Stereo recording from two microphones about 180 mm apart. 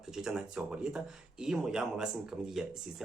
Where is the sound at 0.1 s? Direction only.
5° right (ahead or behind).